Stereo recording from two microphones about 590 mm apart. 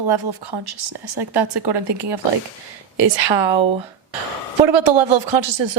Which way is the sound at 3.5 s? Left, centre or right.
Centre.